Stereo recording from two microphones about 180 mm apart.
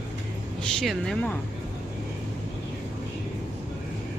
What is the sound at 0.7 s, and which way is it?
Speech, 5° left (ahead or behind).